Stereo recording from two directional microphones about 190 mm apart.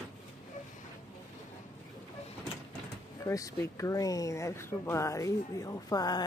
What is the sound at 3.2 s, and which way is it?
Speech, 15° left (ahead or behind).